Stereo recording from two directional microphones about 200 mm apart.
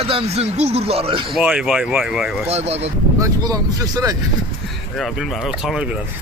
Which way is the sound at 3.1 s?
15° right (ahead or behind).